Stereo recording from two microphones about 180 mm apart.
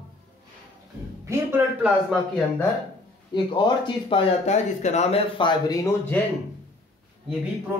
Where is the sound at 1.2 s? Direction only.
15° right (ahead or behind).